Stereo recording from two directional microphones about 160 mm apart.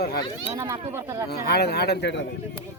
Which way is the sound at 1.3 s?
90° left.